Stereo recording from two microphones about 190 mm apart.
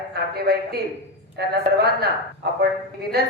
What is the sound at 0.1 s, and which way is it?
A man's voice, 55° right (ahead or behind).